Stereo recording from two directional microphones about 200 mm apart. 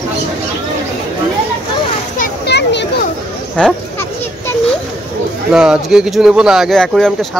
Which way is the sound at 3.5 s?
5° left (ahead or behind).